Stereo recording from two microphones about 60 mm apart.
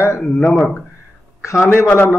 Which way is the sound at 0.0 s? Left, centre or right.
Left.